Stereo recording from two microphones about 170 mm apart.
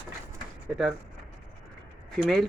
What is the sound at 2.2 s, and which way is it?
Speech, centre (ahead or behind).